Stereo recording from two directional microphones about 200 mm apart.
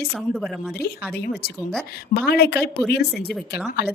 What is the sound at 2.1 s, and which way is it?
Speech, 50° left (ahead or behind).